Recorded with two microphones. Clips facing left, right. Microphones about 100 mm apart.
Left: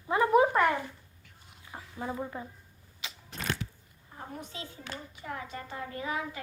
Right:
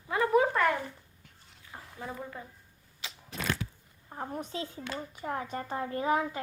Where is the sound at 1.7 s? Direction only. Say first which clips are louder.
Left 4 dB; 20° left (ahead or behind).